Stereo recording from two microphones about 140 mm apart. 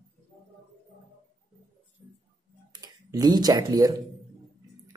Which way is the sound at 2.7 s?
30° right (ahead or behind).